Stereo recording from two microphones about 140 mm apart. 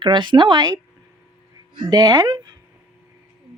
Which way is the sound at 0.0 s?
35° right (ahead or behind).